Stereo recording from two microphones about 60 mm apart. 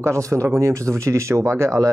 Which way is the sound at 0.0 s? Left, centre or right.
Right.